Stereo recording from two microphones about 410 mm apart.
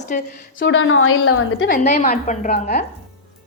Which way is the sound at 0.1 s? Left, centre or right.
Centre.